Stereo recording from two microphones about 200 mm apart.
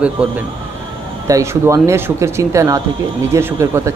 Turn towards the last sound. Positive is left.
turn(degrees=-15)  # may be behind; listen again after turning